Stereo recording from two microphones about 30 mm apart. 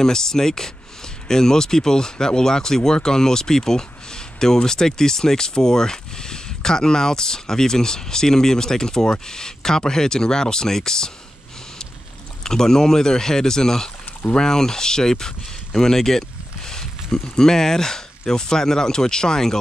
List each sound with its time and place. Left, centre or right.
0.0 s speech: centre
12.4 s speech: centre